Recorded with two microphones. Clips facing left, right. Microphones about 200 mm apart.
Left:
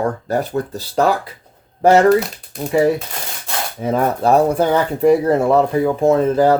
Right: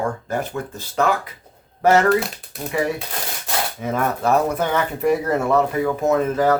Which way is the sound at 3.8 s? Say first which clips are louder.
Left 6 dB; 30° left (ahead or behind).